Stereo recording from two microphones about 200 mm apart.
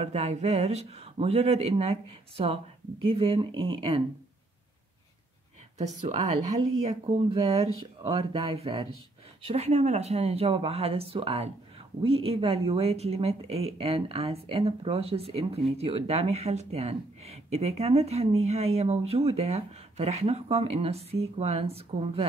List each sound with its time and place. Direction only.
0.0 s speech: 35° right (ahead or behind)
6.0 s speech: 35° right (ahead or behind)